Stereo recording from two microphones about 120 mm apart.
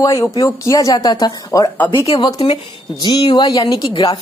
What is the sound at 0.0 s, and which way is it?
A woman's voice, 25° left (ahead or behind).